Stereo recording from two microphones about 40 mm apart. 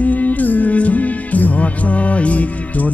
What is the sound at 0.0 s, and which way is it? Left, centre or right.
Music, left.